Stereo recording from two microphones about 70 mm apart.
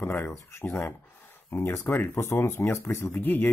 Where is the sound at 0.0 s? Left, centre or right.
Left.